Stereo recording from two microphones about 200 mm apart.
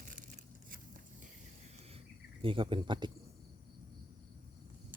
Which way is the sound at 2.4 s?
25° right (ahead or behind).